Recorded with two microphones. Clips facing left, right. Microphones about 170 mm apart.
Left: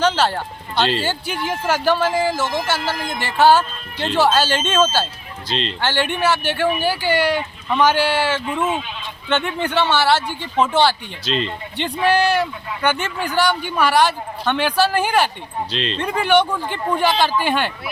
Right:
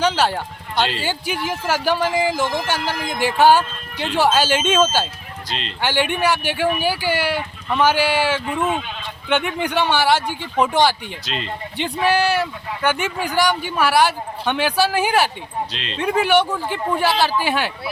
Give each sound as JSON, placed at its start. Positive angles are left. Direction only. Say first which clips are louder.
{"t": 0.0, "sound": "speech", "louder": "left 1 dB", "side_deg": -10}
{"t": 5.5, "sound": "speech", "louder": "left 6 dB", "side_deg": 30}
{"t": 5.8, "sound": "speech", "louder": "right 1 dB", "side_deg": -10}
{"t": 11.3, "sound": "speech", "louder": "left 7 dB", "side_deg": 30}
{"t": 11.8, "sound": "speech", "louder": "left 1 dB", "side_deg": -10}
{"t": 15.7, "sound": "speech", "louder": "left 7 dB", "side_deg": 30}
{"t": 16.0, "sound": "speech", "louder": "right 1 dB", "side_deg": -5}